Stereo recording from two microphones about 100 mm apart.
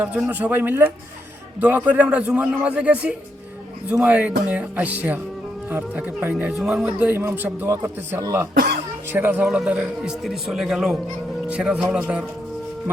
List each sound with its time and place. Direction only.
0.3 s a man's voice: 15° right (ahead or behind)
6.6 s a man's voice: 5° right (ahead or behind)
7.8 s speech: 30° right (ahead or behind)
9.5 s a man's voice: 10° right (ahead or behind)